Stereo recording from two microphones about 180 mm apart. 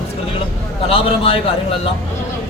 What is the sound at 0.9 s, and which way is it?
A man's voice, 30° left (ahead or behind).